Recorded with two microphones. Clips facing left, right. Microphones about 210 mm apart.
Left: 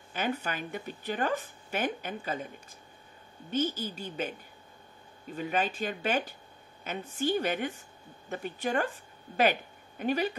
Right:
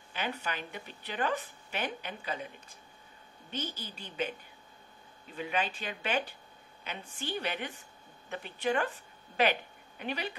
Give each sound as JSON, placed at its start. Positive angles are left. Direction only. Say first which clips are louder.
{"t": 0.1, "sound": "speech", "louder": "left 4 dB", "side_deg": 45}
{"t": 3.4, "sound": "speech", "louder": "left 9 dB", "side_deg": 45}